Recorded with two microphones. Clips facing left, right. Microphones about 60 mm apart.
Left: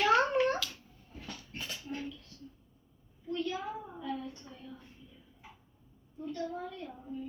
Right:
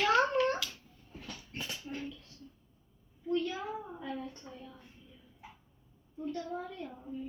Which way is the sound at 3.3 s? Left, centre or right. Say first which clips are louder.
Right 2 dB; centre.